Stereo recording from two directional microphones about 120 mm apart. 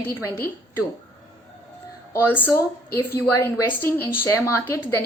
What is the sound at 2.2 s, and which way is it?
A woman's voice, 15° left (ahead or behind).